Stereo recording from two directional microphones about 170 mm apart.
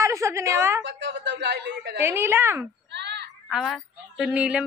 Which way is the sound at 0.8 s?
90° right.